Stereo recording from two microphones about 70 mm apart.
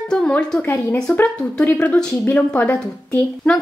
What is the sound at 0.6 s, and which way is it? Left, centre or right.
A woman's voice, left.